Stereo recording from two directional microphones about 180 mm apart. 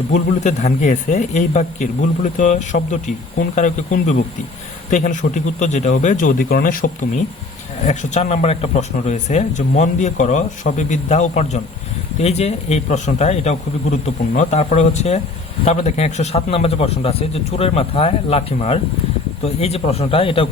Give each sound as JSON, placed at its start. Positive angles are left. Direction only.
{"t": 0.1, "sound": "speech", "side_deg": 40}
{"t": 7.9, "sound": "speech", "side_deg": 40}